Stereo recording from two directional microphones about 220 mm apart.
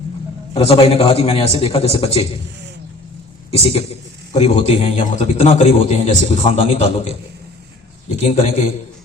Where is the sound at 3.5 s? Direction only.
25° left (ahead or behind).